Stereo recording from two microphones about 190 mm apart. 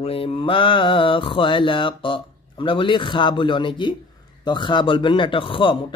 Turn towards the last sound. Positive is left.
turn(degrees=25)  # may be behind; listen again after turning